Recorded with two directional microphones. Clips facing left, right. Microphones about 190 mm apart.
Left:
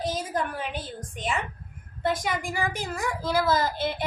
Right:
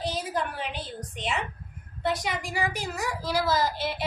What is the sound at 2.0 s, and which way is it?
A woman's voice, 50° left (ahead or behind).